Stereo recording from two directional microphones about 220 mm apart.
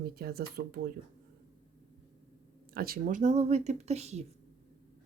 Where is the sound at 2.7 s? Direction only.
40° right (ahead or behind).